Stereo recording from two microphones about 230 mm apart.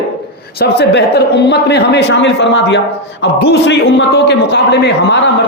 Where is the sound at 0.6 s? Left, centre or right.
Left.